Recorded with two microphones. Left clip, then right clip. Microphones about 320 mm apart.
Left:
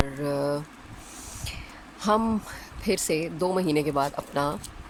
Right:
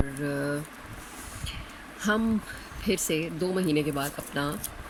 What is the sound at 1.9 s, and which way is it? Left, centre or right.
Speech, centre.